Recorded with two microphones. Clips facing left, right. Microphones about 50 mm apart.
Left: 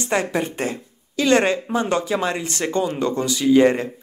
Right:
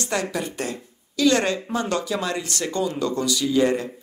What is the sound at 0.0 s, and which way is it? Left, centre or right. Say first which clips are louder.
Speech: left 4 dB; left.